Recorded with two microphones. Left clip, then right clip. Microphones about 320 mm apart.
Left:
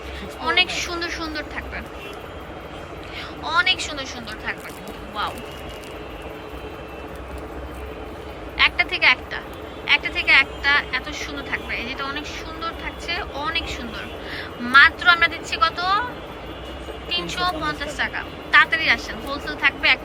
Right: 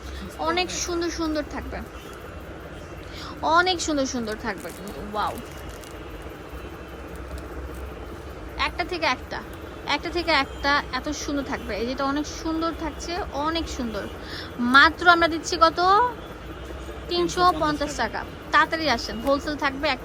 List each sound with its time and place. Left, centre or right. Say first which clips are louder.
0.3 s a woman's voice: left 5 dB; centre
3.4 s a woman's voice: even; centre
8.5 s a woman's voice: left 8 dB; centre
17.1 s a woman's voice: right 3 dB; centre